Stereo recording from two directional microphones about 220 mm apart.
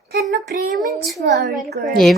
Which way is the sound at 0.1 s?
50° right (ahead or behind).